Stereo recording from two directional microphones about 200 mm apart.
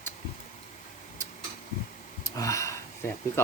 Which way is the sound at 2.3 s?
15° left (ahead or behind).